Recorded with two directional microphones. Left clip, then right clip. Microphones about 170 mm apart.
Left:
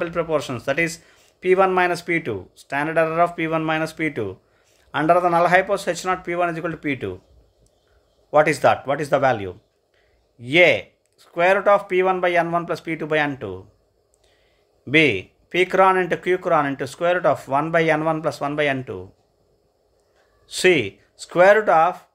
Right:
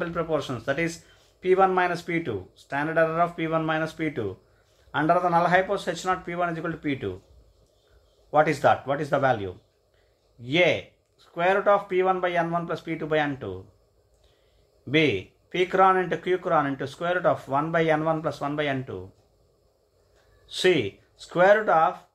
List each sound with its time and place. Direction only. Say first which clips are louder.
0.0 s a man's voice: left 5 dB; 45° left (ahead or behind)
8.3 s a man's voice: left 4 dB; 40° left (ahead or behind)
14.9 s speech: left 6 dB; 45° left (ahead or behind)
20.4 s a man's voice: left 5 dB; 40° left (ahead or behind)